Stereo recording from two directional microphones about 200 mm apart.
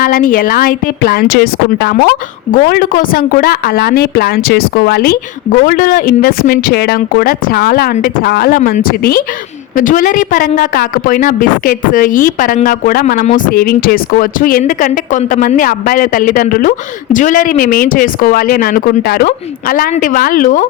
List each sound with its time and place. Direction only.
0.0 s a woman's voice: 45° left (ahead or behind)